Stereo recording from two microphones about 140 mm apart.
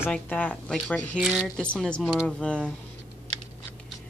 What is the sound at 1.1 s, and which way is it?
Speech, 5° right (ahead or behind).